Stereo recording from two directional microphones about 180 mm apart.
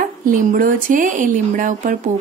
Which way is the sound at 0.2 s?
50° right (ahead or behind).